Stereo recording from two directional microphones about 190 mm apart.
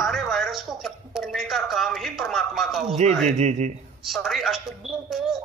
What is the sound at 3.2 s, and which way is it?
Speech, 35° right (ahead or behind).